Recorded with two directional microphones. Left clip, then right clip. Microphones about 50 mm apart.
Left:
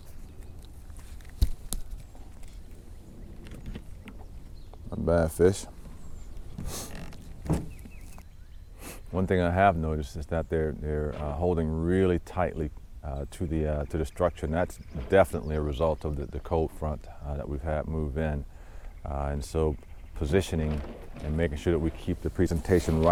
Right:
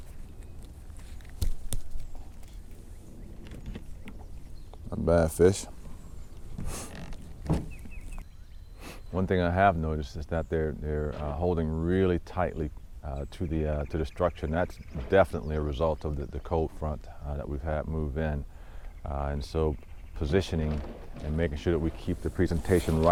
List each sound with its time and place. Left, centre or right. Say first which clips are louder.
4.7 s a sound: right 1 dB; centre
5.0 s speech: right 1 dB; centre
6.6 s a sound: left 1 dB; centre
8.8 s speech: left 1 dB; left
10.3 s speech: left 1 dB; left
13.8 s speech: left 1 dB; left
14.4 s speech: left 1 dB; left
14.7 s speech: even; left
15.1 s speech: left 1 dB; left
19.4 s speech: left 2 dB; left
21.3 s speech: left 1 dB; left